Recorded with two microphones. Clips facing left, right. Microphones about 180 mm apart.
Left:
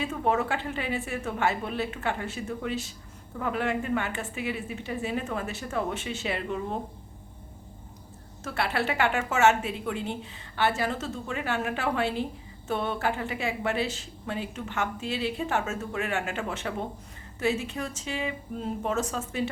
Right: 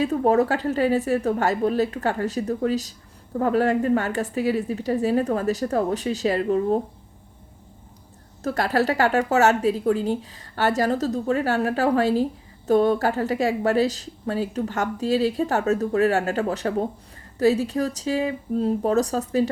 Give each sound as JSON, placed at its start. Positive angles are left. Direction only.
{"t": 0.0, "sound": "speech", "side_deg": -40}
{"t": 8.4, "sound": "speech", "side_deg": -40}